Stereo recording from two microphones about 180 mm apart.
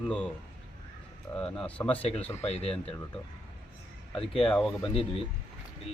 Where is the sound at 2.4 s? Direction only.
35° left (ahead or behind).